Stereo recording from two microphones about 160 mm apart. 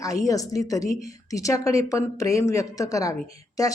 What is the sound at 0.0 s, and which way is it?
Speech, 20° left (ahead or behind).